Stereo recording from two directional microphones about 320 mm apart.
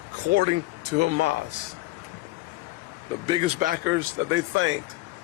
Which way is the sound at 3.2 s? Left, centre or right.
Centre.